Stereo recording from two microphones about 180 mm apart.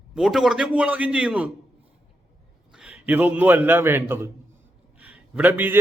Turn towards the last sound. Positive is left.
turn(degrees=-10)  # may be behind; listen again after turning